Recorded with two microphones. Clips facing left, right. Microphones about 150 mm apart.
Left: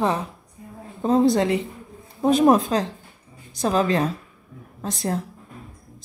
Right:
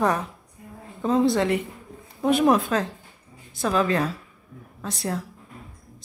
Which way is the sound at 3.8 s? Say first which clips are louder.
Left 1 dB; 20° left (ahead or behind).